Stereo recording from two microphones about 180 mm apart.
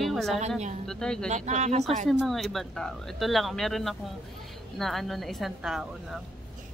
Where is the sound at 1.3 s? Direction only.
40° right (ahead or behind).